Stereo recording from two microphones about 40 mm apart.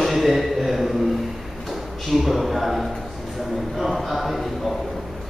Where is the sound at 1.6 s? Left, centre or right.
Centre.